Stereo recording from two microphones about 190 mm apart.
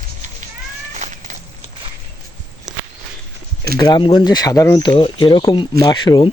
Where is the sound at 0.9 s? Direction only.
40° right (ahead or behind).